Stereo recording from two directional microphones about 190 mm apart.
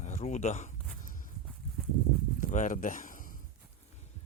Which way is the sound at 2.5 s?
40° left (ahead or behind).